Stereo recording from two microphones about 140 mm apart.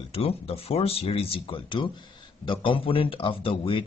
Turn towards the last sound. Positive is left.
turn(degrees=40)  # may be behind; listen again after turning